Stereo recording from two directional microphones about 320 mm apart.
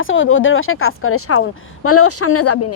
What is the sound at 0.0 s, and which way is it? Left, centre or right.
Speech, left.